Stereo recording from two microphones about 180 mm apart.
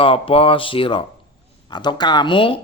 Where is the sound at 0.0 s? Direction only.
30° left (ahead or behind).